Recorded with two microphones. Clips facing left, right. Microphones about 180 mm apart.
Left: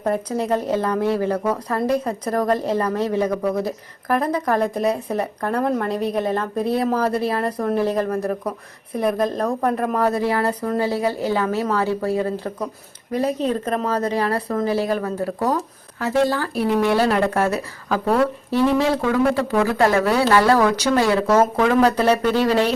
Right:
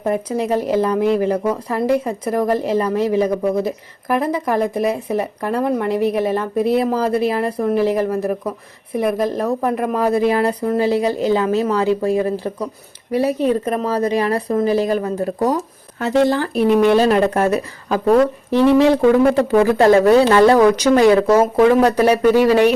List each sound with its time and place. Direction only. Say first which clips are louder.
0.0 s speech: right 2 dB; 15° right (ahead or behind)